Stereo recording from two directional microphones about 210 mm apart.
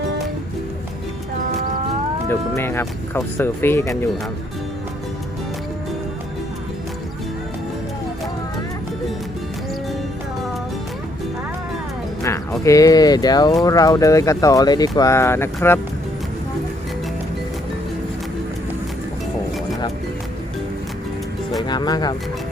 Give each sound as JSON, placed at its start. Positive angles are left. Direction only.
{"t": 2.6, "sound": "speech", "side_deg": 10}
{"t": 12.2, "sound": "speech", "side_deg": 15}
{"t": 21.7, "sound": "speech", "side_deg": 20}